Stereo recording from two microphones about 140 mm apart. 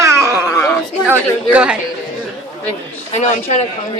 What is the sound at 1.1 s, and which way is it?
Speech, 10° right (ahead or behind).